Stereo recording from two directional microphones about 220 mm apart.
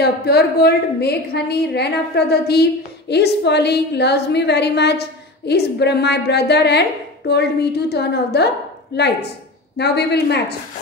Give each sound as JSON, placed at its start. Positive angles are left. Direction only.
{"t": 0.0, "sound": "a woman's voice", "side_deg": 45}